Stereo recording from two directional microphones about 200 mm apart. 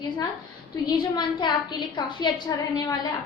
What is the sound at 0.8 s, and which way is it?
A woman's voice, 20° left (ahead or behind).